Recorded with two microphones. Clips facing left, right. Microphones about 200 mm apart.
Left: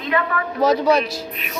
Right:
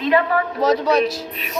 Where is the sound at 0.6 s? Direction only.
Centre (ahead or behind).